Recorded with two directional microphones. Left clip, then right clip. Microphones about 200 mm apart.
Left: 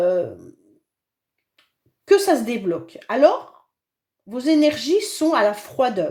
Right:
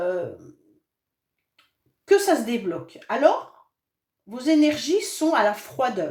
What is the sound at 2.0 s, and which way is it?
Speech, 45° left (ahead or behind).